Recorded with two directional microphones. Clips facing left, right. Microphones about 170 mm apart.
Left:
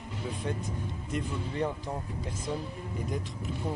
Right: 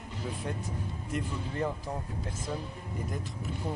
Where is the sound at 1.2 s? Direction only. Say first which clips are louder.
Left 2 dB; centre (ahead or behind).